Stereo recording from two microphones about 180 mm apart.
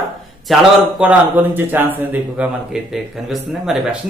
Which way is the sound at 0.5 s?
5° right (ahead or behind).